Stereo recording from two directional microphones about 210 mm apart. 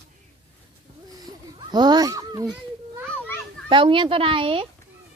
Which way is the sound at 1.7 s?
20° right (ahead or behind).